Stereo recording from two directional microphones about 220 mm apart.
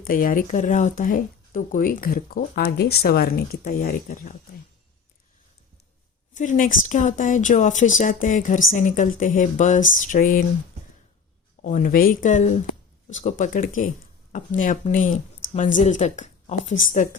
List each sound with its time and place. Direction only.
0.1 s speech: 40° left (ahead or behind)
6.3 s speech: 35° left (ahead or behind)
11.6 s speech: 35° left (ahead or behind)